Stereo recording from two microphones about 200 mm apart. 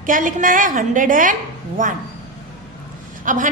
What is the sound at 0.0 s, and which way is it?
A woman's voice, 40° right (ahead or behind).